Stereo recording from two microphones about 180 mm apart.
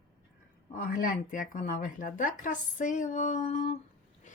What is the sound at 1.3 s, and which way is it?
A woman's voice, 45° left (ahead or behind).